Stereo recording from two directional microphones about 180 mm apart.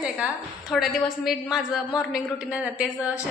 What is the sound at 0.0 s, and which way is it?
A woman's voice, 5° right (ahead or behind).